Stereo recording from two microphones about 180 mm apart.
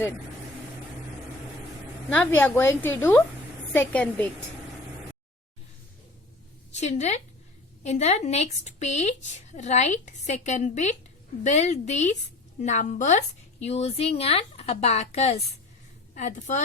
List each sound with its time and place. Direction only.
2.0 s a woman's voice: 10° left (ahead or behind)
6.7 s a woman's voice: 40° left (ahead or behind)